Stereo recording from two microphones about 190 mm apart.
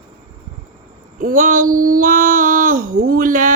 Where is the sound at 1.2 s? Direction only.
45° right (ahead or behind).